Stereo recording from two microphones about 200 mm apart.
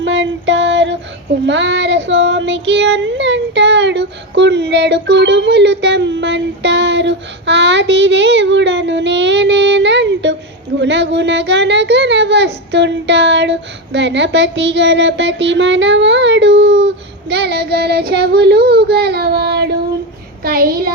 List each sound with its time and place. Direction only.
0.0 s a sound: 65° right (ahead or behind)
1.5 s child singing: 65° right (ahead or behind)
20.4 s a child's voice: 50° right (ahead or behind)